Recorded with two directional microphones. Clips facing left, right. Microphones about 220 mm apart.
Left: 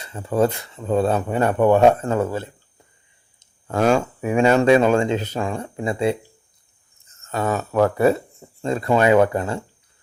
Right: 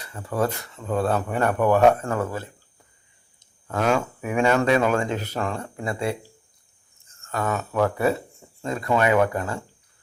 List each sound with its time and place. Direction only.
0.0 s speech: 25° left (ahead or behind)
3.7 s speech: 30° left (ahead or behind)
7.1 s a sound: 20° left (ahead or behind)
7.7 s speech: 40° left (ahead or behind)